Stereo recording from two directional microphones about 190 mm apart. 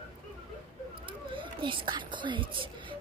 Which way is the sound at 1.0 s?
25° right (ahead or behind).